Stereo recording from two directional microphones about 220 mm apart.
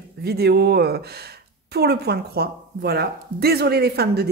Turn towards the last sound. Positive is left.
turn(degrees=-45)  # may be behind; listen again after turning